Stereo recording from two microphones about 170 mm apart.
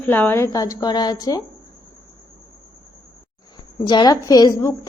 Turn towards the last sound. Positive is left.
turn(degrees=20)  # may be behind; listen again after turning